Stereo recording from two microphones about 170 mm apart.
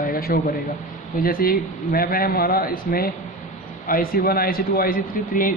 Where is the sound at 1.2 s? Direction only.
60° left (ahead or behind).